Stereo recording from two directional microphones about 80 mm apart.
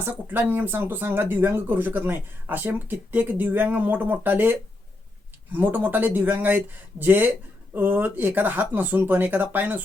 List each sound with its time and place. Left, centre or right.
0.0 s speech: right